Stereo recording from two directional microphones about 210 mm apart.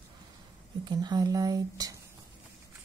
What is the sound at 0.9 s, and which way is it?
Speech, 20° right (ahead or behind).